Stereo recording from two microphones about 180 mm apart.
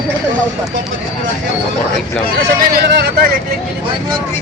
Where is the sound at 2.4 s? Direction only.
65° right (ahead or behind).